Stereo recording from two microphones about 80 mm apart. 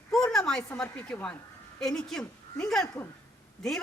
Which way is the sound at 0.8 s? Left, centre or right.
Centre.